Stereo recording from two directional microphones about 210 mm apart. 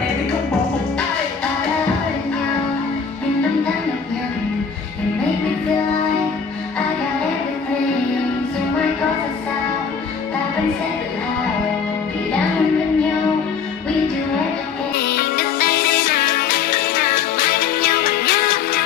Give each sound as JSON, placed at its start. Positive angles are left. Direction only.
{"t": 15.0, "sound": "music", "side_deg": 50}